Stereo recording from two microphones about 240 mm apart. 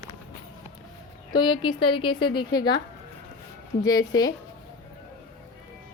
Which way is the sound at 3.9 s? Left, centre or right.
Centre.